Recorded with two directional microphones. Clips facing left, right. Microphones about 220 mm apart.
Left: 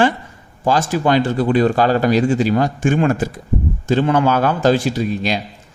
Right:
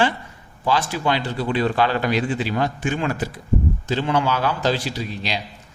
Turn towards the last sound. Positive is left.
turn(degrees=50)  # may be behind; listen again after turning